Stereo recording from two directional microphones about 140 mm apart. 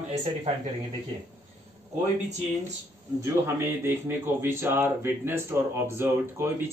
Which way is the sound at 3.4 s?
15° right (ahead or behind).